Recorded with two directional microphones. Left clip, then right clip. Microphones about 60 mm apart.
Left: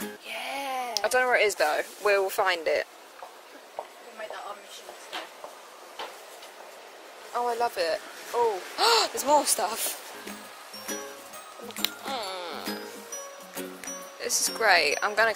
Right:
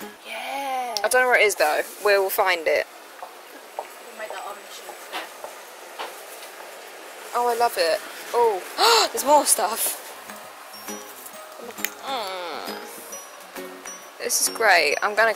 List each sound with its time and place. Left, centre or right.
0.3 s a sound: left
0.9 s speech: centre
7.3 s speech: centre
12.1 s music: centre
14.2 s speech: centre